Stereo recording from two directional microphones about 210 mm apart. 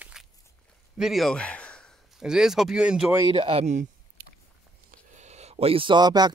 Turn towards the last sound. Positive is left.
turn(degrees=-20)  # may be behind; listen again after turning